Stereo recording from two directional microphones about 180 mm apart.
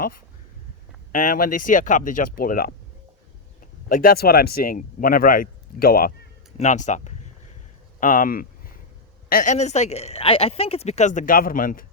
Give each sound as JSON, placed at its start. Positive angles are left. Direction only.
{"t": 1.1, "sound": "speech", "side_deg": 50}
{"t": 3.8, "sound": "speech", "side_deg": 55}
{"t": 6.6, "sound": "speech", "side_deg": 40}